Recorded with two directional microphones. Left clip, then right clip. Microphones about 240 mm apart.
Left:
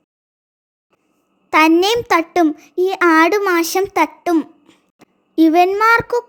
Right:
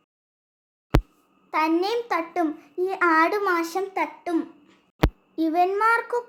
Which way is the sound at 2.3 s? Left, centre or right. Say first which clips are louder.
Left 10 dB; left.